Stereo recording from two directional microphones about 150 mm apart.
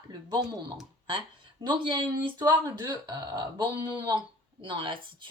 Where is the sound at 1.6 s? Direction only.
30° right (ahead or behind).